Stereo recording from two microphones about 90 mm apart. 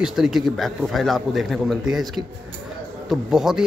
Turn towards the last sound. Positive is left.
turn(degrees=-5)  # may be behind; listen again after turning